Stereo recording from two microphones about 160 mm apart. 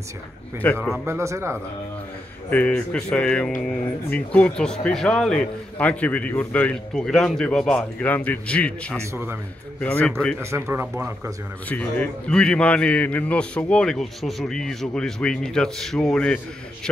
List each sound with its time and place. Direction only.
0.6 s speech: 10° left (ahead or behind)
1.0 s speech: 15° right (ahead or behind)
2.5 s a man's voice: 5° left (ahead or behind)
8.9 s speech: 15° right (ahead or behind)
9.8 s speech: 10° left (ahead or behind)
10.4 s speech: 15° right (ahead or behind)
11.7 s a man's voice: 10° left (ahead or behind)